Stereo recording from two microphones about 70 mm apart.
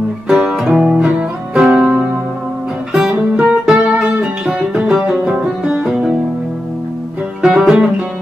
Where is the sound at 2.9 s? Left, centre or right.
Centre.